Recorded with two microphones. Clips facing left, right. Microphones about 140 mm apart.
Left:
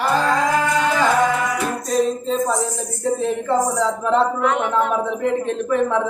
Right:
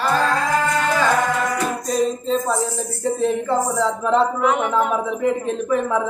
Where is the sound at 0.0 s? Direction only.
15° left (ahead or behind).